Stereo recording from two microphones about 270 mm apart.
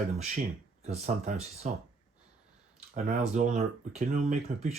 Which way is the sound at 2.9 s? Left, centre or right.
Right.